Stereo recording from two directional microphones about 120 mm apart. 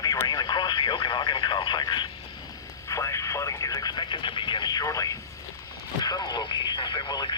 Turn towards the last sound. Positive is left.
turn(degrees=45)  # may be behind; listen again after turning